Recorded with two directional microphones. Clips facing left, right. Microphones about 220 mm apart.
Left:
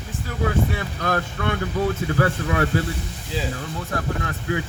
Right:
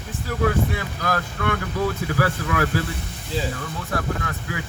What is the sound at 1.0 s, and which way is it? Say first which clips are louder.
Speech: left 1 dB; 25° left (ahead or behind).